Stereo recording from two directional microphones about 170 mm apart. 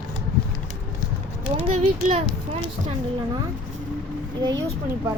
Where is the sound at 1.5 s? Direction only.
35° right (ahead or behind).